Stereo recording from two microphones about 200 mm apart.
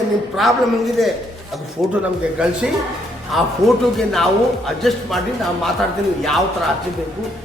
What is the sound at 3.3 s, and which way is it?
A man's voice, centre (ahead or behind).